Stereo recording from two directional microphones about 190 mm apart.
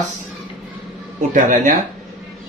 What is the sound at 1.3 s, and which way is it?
Speech, 40° right (ahead or behind).